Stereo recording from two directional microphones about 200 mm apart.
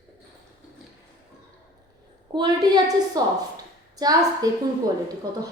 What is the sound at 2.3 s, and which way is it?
A woman's voice, 20° right (ahead or behind).